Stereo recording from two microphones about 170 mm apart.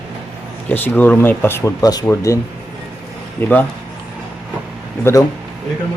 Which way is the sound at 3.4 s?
10° left (ahead or behind).